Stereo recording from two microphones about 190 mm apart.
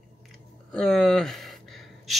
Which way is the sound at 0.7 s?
5° left (ahead or behind).